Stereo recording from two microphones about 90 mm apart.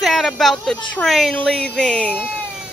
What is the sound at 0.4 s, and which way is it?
Speech, centre (ahead or behind).